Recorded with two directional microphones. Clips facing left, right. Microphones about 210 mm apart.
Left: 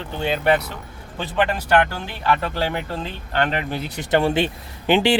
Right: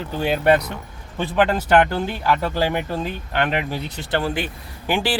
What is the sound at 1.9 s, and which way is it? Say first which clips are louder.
Speech: right 2 dB; 15° right (ahead or behind).